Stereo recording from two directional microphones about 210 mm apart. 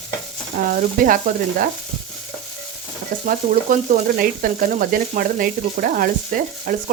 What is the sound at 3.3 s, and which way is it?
Frying, 40° right (ahead or behind).